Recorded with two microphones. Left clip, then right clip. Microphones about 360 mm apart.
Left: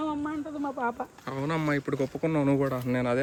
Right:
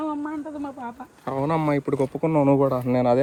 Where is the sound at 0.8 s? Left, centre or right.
Centre.